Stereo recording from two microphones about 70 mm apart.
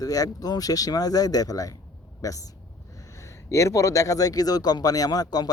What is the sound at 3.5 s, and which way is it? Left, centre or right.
Speech, left.